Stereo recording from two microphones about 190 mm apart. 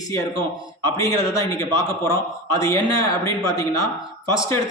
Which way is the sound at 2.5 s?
15° left (ahead or behind).